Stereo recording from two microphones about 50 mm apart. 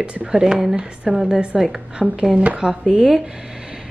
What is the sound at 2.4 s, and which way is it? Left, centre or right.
Speech, right.